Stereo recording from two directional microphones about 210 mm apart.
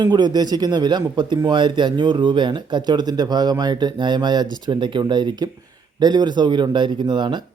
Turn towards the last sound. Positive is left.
turn(degrees=-20)  # may be behind; listen again after turning